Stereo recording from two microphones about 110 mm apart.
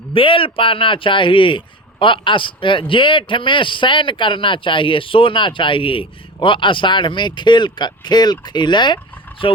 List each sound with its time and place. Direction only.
0.1 s speech: 55° left (ahead or behind)